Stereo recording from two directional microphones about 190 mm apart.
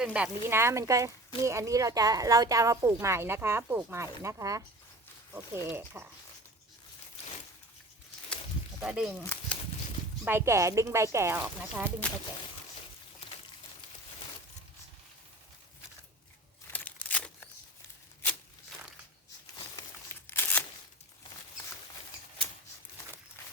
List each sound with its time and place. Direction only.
0.0 s speech: 5° right (ahead or behind)
8.8 s speech: 5° right (ahead or behind)
9.2 s bird flight: 10° left (ahead or behind)
10.2 s speech: 15° right (ahead or behind)
16.7 s a sound: 10° left (ahead or behind)
20.2 s a sound: 10° left (ahead or behind)
23.4 s walk: 10° left (ahead or behind)